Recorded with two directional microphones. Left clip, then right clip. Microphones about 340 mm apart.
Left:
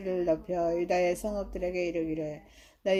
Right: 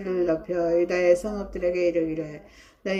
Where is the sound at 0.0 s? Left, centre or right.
Left.